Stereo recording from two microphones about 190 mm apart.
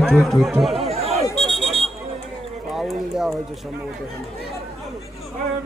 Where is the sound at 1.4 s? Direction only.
Centre (ahead or behind).